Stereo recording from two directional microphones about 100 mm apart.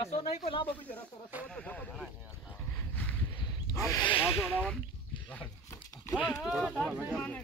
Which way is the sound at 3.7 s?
35° left (ahead or behind).